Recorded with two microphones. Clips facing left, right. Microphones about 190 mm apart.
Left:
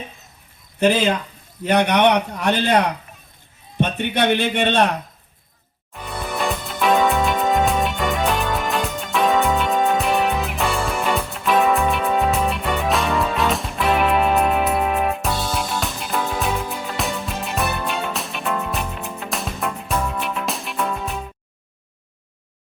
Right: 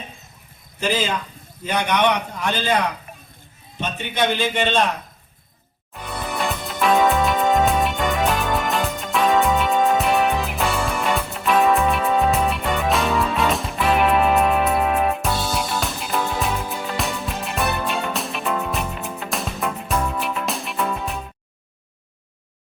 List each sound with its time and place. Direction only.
0.8 s a man's voice: 60° left (ahead or behind)
5.9 s music: centre (ahead or behind)